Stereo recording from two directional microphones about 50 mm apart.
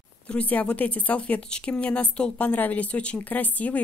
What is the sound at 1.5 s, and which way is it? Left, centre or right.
A woman's voice, left.